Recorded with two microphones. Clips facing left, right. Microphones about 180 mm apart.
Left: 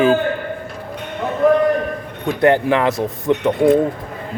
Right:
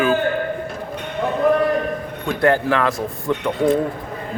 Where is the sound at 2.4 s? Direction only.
20° left (ahead or behind).